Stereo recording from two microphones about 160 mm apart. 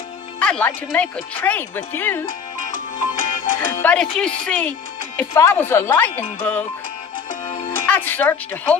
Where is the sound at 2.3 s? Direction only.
55° left (ahead or behind).